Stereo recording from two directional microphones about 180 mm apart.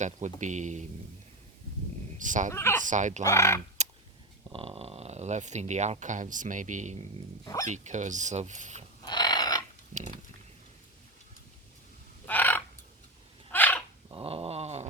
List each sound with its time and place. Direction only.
0.0 s speech: 40° right (ahead or behind)
2.1 s speech: 45° right (ahead or behind)
2.5 s fowl: 15° left (ahead or behind)
2.8 s speech: 45° right (ahead or behind)
3.2 s fowl: 15° left (ahead or behind)
3.8 s a sound: 40° right (ahead or behind)
4.5 s speech: 30° right (ahead or behind)
7.4 s speech: 20° left (ahead or behind)
7.7 s speech: 40° right (ahead or behind)
9.0 s mechanisms: 25° left (ahead or behind)
12.2 s a sound: 10° left (ahead or behind)
13.5 s dog: 10° left (ahead or behind)
14.1 s a sound: 30° right (ahead or behind)